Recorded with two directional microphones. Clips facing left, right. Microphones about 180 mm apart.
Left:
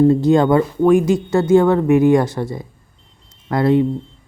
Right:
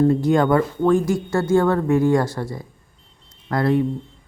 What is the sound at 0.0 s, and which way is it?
Speech, 25° left (ahead or behind).